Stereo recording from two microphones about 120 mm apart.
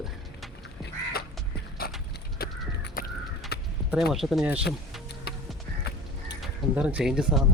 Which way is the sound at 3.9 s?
5° right (ahead or behind).